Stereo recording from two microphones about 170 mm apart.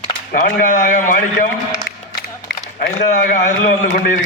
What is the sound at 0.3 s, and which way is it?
A man's voice, 50° left (ahead or behind).